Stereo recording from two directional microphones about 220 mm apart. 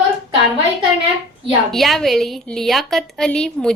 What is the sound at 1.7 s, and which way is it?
A woman's voice, centre (ahead or behind).